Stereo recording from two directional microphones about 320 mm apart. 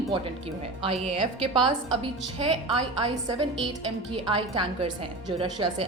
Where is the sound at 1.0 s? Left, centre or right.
Centre.